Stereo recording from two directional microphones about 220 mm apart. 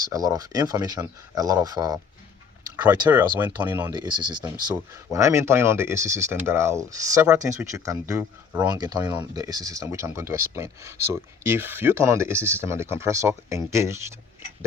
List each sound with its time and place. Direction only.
0.0 s speech: 15° right (ahead or behind)
3.9 s speech: 20° right (ahead or behind)